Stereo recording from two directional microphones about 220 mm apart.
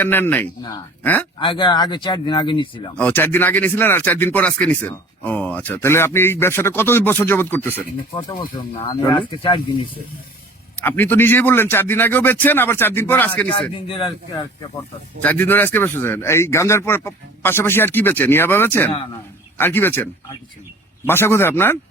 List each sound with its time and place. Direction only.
0.0 s speech: 10° left (ahead or behind)
1.4 s speech: 20° left (ahead or behind)
2.9 s speech: 5° left (ahead or behind); by 9.9 s 20° left (ahead or behind)
10.8 s speech: 10° left (ahead or behind)
13.5 s speech: 25° left (ahead or behind)
15.2 s speech: 10° left (ahead or behind)
21.1 s speech: 10° left (ahead or behind)